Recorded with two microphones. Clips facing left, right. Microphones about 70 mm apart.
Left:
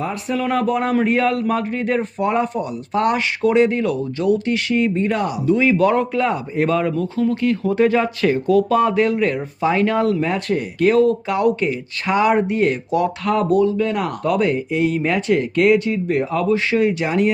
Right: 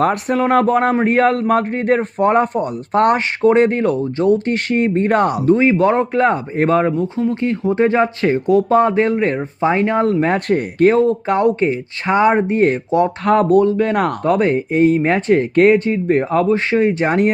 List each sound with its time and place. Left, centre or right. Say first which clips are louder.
0.0 s speech: right 8 dB; right
0.3 s speech: right 4 dB; right
5.5 s speech: right 1 dB; right